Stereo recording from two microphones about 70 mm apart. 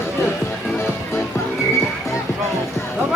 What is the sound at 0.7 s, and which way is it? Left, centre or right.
Music, left.